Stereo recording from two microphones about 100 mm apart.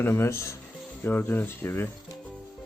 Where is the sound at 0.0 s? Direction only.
30° left (ahead or behind).